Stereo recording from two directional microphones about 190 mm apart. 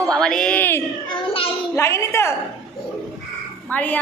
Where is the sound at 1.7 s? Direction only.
15° left (ahead or behind).